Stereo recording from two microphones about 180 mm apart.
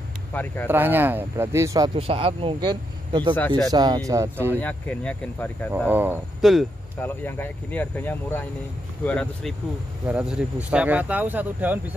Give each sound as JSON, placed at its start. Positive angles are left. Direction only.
{"t": 0.3, "sound": "speech", "side_deg": 10}
{"t": 0.7, "sound": "speech", "side_deg": -10}
{"t": 2.0, "sound": "speech", "side_deg": -30}
{"t": 3.3, "sound": "speech", "side_deg": 5}
{"t": 3.7, "sound": "speech", "side_deg": -20}
{"t": 4.6, "sound": "speech", "side_deg": 10}
{"t": 5.9, "sound": "speech", "side_deg": -10}
{"t": 6.4, "sound": "speech", "side_deg": 0}
{"t": 7.0, "sound": "speech", "side_deg": 10}
{"t": 10.0, "sound": "speech", "side_deg": -5}